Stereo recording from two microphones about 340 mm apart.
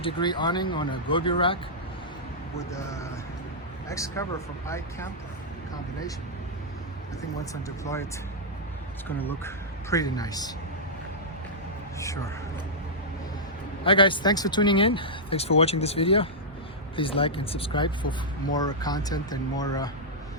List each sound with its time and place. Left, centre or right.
0.0 s speech: centre
2.6 s speech: centre
7.5 s speech: centre
9.1 s speech: centre
11.9 s speech: centre
13.8 s speech: centre